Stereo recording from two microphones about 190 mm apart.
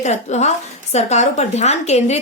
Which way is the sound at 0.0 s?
35° left (ahead or behind).